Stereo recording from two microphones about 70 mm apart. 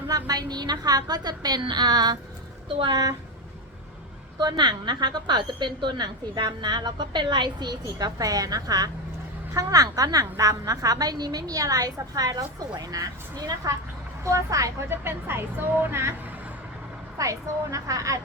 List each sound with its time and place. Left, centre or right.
0.1 s a woman's voice: right
2.9 s a woman's voice: right
4.4 s a woman's voice: right
14.8 s a woman's voice: right
17.2 s a woman's voice: right